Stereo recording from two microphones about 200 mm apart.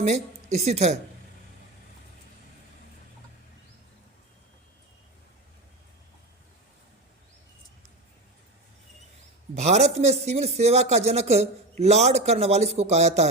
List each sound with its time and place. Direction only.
0.0 s a woman's voice: 35° right (ahead or behind)
9.6 s speech: 35° right (ahead or behind)